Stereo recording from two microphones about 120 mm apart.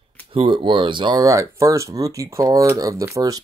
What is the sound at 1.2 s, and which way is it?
Speech, 25° right (ahead or behind).